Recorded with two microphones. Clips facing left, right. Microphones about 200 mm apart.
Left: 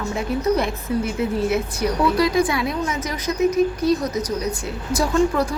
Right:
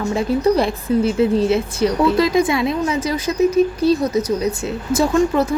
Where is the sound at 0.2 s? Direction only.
30° right (ahead or behind).